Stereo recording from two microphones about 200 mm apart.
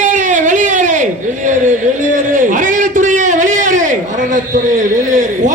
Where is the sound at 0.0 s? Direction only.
40° right (ahead or behind).